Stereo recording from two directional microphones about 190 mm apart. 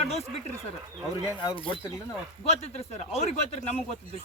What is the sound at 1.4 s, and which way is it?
A man's voice, 25° left (ahead or behind).